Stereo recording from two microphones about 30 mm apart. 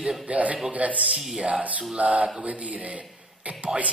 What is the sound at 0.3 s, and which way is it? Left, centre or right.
Speech, right.